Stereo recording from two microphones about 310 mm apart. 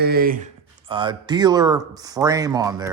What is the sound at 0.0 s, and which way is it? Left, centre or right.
Speech, right.